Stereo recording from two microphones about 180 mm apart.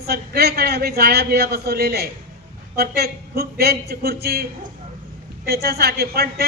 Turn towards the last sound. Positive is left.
turn(degrees=-60)  # may be behind; listen again after turning